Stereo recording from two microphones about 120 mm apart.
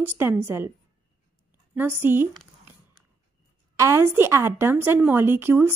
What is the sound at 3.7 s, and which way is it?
A woman's voice, 25° right (ahead or behind).